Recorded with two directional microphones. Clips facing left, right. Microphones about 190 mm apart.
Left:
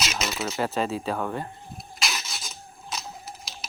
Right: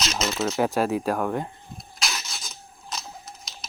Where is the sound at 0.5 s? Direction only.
10° right (ahead or behind).